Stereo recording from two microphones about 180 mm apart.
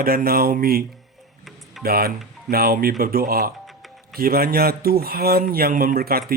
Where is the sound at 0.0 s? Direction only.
55° right (ahead or behind).